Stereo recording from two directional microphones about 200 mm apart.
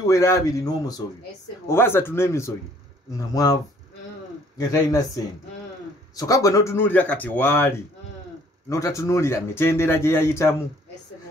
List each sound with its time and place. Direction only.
0.0 s speech: 15° left (ahead or behind)
4.6 s speech: 15° left (ahead or behind)